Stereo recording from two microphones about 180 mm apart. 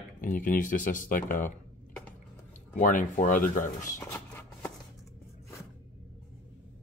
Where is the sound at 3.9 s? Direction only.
15° left (ahead or behind).